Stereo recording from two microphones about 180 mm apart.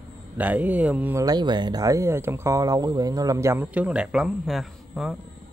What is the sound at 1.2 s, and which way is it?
Speech, 25° right (ahead or behind).